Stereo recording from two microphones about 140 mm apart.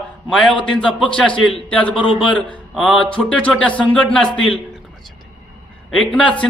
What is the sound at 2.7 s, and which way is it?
A man's voice, 5° left (ahead or behind).